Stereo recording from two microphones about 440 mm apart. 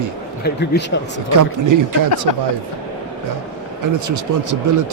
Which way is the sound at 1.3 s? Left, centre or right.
Right.